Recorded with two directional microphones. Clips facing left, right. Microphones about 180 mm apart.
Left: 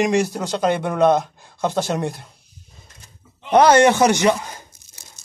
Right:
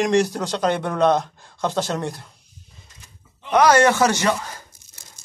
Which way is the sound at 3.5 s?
25° left (ahead or behind).